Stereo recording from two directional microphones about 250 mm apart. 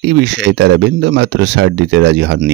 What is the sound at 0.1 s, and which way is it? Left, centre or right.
Speech, right.